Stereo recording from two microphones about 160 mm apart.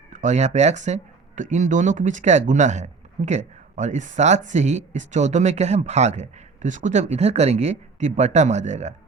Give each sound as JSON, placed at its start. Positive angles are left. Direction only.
{"t": 0.1, "sound": "speech", "side_deg": -50}